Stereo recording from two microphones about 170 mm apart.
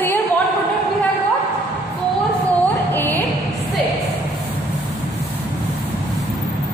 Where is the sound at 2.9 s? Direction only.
10° left (ahead or behind).